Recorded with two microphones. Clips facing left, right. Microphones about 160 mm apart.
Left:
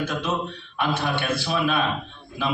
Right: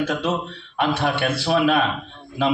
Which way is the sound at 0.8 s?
70° right (ahead or behind).